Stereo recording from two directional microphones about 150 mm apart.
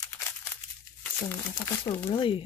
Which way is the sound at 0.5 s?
15° left (ahead or behind).